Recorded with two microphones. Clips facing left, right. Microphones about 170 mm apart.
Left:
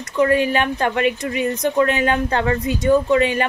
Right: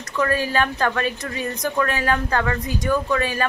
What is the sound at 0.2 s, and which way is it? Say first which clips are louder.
Speech: left 5 dB; 20° left (ahead or behind).